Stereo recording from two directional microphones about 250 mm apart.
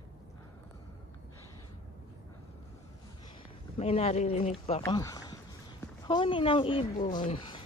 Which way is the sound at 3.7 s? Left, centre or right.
Left.